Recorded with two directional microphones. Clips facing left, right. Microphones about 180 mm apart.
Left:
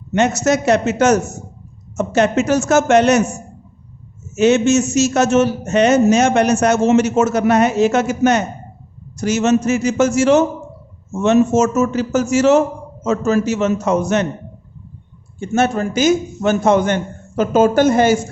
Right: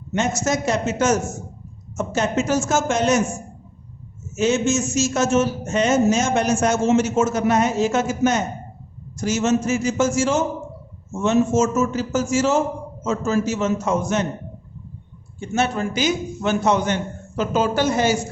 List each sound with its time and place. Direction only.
0.1 s a man's voice: 70° left (ahead or behind)
15.4 s a man's voice: 50° left (ahead or behind)